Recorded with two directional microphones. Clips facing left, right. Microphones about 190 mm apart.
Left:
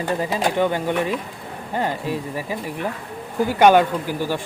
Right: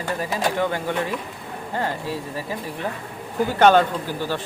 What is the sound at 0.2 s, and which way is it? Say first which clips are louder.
Speech: left 1 dB; 20° left (ahead or behind).